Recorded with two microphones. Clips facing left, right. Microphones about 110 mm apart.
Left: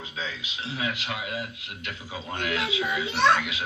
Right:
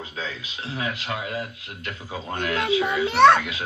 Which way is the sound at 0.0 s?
40° right (ahead or behind).